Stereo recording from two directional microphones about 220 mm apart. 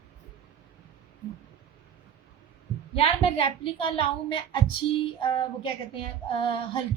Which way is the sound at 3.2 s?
25° left (ahead or behind).